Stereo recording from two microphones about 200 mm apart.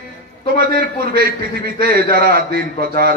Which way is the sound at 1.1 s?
50° right (ahead or behind).